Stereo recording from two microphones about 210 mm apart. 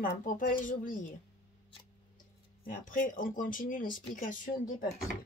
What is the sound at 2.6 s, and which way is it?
Speech, 40° left (ahead or behind).